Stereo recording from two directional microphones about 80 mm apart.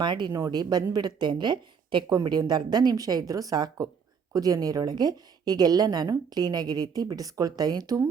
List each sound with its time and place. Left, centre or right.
0.0 s a woman's voice: right
2.5 s a woman's voice: right